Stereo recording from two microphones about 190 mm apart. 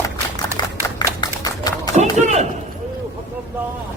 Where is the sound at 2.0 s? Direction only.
35° right (ahead or behind).